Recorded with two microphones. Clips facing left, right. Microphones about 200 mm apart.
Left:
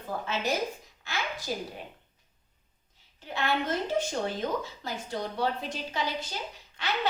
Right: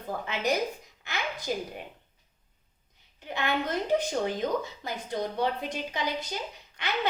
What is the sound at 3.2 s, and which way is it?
A woman's voice, 20° right (ahead or behind).